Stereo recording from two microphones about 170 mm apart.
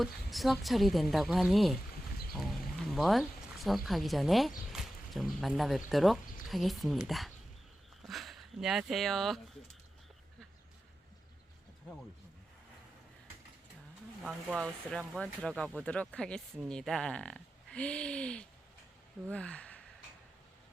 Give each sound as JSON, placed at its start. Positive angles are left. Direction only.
{"t": 0.0, "sound": "speech", "side_deg": 0}
{"t": 2.3, "sound": "a sound", "side_deg": 0}
{"t": 3.8, "sound": "speech", "side_deg": 0}
{"t": 14.2, "sound": "speech", "side_deg": 0}